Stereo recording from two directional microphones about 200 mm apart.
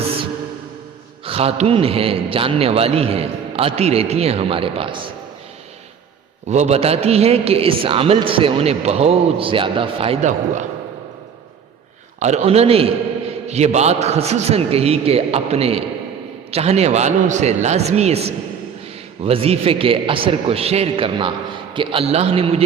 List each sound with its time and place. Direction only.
1.2 s a man's voice: 30° right (ahead or behind)
6.5 s a man's voice: 35° right (ahead or behind)
12.2 s a man's voice: 35° right (ahead or behind)